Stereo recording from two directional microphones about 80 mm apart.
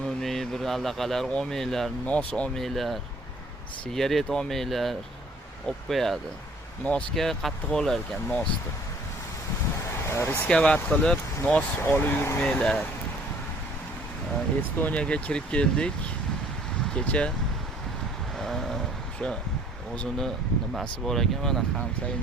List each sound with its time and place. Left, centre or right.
0.0 s speech: centre
2.0 s speech: centre
2.6 s speech: centre
7.2 s speech: centre
10.1 s speech: left
10.4 s speech: centre
11.9 s speech: left
12.4 s speech: centre
14.8 s speech: centre
18.3 s a sound: centre
19.2 s speech: centre